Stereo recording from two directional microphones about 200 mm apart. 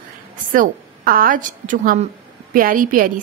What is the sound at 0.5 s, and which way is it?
A woman's voice, 45° right (ahead or behind).